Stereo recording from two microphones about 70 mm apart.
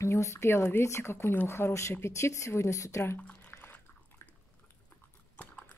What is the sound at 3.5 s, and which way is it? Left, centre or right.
Biting, left.